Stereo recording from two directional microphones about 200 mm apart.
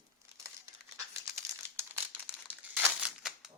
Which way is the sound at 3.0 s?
Centre (ahead or behind).